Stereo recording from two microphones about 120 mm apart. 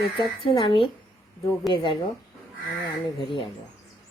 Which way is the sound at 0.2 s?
45° left (ahead or behind).